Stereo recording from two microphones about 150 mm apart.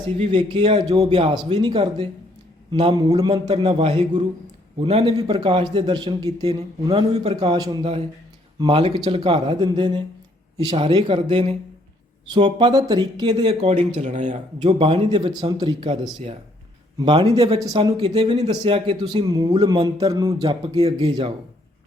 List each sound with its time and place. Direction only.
0.2 s speech: 35° right (ahead or behind)
3.1 s speech: 40° right (ahead or behind)
5.1 s a man's voice: 25° right (ahead or behind)
6.9 s speech: 40° right (ahead or behind)
7.4 s a man's voice: 30° right (ahead or behind)
12.5 s speech: 30° right (ahead or behind)
14.0 s a man's voice: 55° right (ahead or behind); by 18.3 s 35° right (ahead or behind)
18.3 s speech: 45° right (ahead or behind)
18.9 s a man's voice: 30° right (ahead or behind)